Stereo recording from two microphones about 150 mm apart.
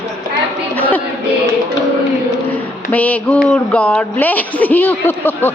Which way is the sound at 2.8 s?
10° left (ahead or behind).